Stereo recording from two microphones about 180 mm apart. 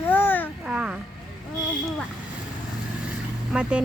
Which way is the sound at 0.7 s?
5° right (ahead or behind).